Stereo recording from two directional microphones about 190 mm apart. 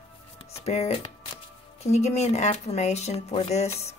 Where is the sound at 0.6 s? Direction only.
35° left (ahead or behind).